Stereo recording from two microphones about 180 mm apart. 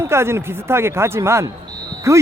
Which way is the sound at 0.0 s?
15° right (ahead or behind).